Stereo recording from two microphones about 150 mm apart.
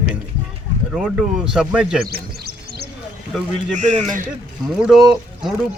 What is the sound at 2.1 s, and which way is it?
Music, 90° right.